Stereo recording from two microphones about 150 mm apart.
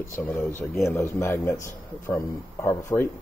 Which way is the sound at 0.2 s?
15° left (ahead or behind).